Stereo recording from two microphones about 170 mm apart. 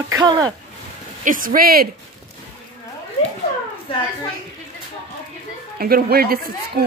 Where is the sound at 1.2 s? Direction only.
55° right (ahead or behind).